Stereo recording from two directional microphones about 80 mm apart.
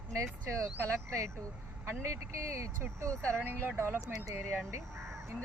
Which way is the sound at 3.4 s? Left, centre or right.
Right.